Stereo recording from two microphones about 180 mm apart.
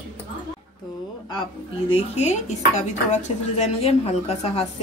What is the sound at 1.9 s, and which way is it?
A woman's voice, 40° left (ahead or behind).